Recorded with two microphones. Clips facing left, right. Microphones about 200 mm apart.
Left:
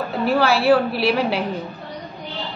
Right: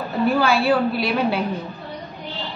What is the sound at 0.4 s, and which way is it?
A woman's voice, 65° left (ahead or behind).